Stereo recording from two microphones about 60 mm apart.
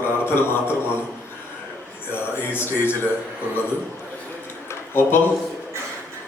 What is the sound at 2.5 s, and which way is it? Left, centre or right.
Speech, left.